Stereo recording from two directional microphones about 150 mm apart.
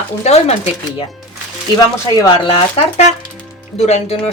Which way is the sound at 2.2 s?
30° left (ahead or behind).